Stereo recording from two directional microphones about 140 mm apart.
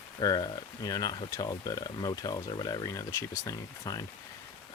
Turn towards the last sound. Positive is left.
turn(degrees=25)  # may be behind; listen again after turning